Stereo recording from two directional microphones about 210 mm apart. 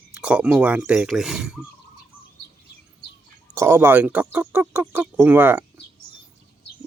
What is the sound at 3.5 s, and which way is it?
Speech, 10° right (ahead or behind).